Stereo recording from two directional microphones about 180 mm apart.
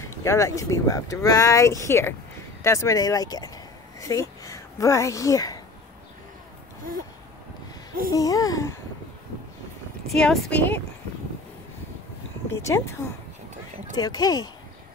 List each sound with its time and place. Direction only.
0.0 s a child's voice: 15° left (ahead or behind)
6.9 s a sound: 55° right (ahead or behind)
8.1 s speech: 20° left (ahead or behind)
10.0 s speech: centre (ahead or behind)
12.4 s speech: 15° left (ahead or behind)
13.9 s speech: 20° left (ahead or behind)